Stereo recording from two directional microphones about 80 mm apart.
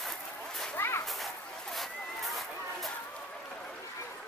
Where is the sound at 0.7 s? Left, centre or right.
Left.